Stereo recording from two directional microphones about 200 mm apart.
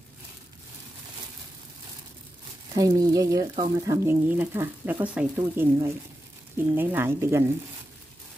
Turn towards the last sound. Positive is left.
turn(degrees=-10)  # may be behind; listen again after turning